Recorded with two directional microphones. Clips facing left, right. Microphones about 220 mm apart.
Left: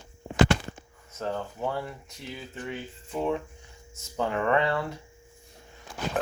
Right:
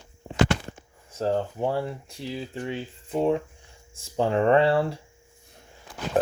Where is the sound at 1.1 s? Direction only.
30° right (ahead or behind).